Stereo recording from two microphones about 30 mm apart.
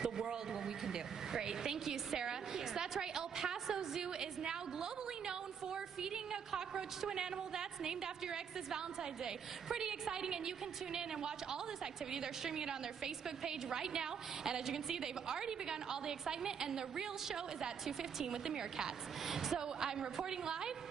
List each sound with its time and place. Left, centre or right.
0.0 s a sound: centre
2.1 s a woman's voice: centre
6.5 s a woman's voice: centre
19.2 s a woman's voice: centre